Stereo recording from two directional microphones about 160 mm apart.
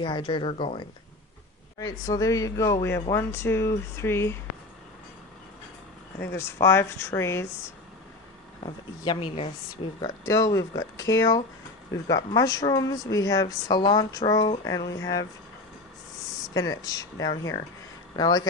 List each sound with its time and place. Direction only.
0.0 s speech: 30° left (ahead or behind)
1.8 s speech: 20° left (ahead or behind)
6.3 s speech: 15° left (ahead or behind)
9.0 s speech: 35° left (ahead or behind)
9.9 s speech: 20° left (ahead or behind)
16.5 s speech: 20° left (ahead or behind)